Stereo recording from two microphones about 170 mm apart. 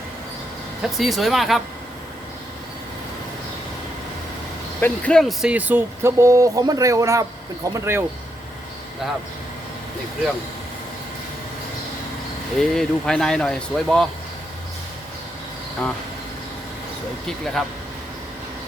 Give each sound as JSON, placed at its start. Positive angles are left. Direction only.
{"t": 0.8, "sound": "speech", "side_deg": 0}
{"t": 4.8, "sound": "speech", "side_deg": 5}
{"t": 12.5, "sound": "speech", "side_deg": 0}
{"t": 17.2, "sound": "speech", "side_deg": 5}